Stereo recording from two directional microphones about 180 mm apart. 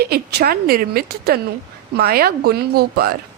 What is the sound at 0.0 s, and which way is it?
A woman's voice, 60° right (ahead or behind).